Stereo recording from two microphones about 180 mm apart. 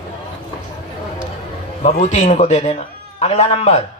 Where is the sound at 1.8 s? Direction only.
40° left (ahead or behind).